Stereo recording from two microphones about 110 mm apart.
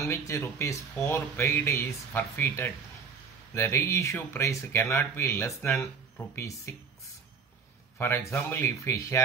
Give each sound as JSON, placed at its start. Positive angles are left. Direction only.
{"t": 0.0, "sound": "speech", "side_deg": 25}
{"t": 8.0, "sound": "speech", "side_deg": 25}